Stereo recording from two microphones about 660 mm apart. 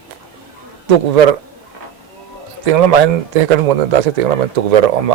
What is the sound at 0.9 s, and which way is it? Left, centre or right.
Speech, right.